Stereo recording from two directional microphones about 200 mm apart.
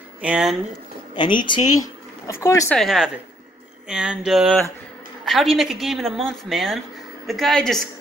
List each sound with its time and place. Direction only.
0.2 s a woman's voice: 5° right (ahead or behind)
1.1 s speech: 25° left (ahead or behind)
2.7 s a woman's voice: centre (ahead or behind)